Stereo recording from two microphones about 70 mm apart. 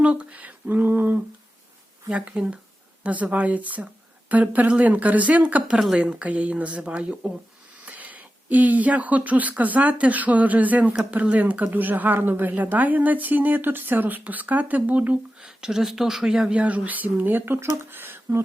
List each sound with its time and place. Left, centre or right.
0.0 s a sound: centre
2.0 s speech: centre
15.4 s speech: centre; by 18.2 s right